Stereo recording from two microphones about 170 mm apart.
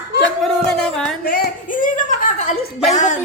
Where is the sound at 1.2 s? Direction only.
60° left (ahead or behind).